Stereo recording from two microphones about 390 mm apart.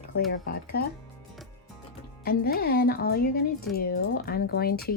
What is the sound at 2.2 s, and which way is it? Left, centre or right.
Speech, left.